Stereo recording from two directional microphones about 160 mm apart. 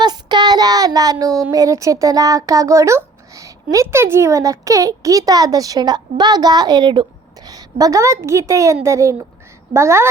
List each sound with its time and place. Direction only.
0.0 s a woman's voice: 25° right (ahead or behind)